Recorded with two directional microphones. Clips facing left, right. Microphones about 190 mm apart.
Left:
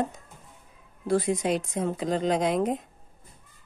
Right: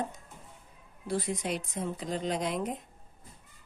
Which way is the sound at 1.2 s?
90° left.